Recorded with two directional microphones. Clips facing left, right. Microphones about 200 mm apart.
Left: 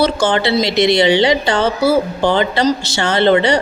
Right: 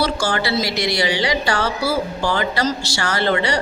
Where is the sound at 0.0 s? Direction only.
20° left (ahead or behind).